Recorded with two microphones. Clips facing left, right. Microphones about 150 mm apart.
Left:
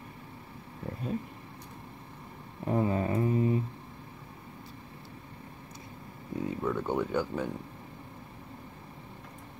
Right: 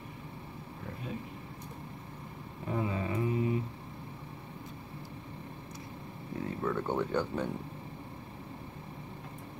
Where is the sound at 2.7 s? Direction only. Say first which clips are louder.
Left 5 dB; 40° left (ahead or behind).